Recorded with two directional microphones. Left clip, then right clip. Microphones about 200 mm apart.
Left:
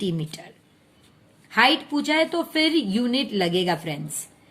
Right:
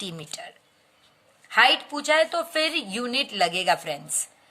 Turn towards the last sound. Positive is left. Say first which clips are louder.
# right 1 dB
turn(degrees=-25)  # may be behind; listen again after turning